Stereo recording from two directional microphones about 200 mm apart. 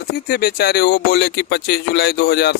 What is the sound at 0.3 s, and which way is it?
Speech, 50° left (ahead or behind).